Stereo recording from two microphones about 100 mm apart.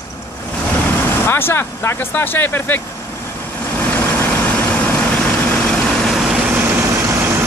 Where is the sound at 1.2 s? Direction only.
20° left (ahead or behind).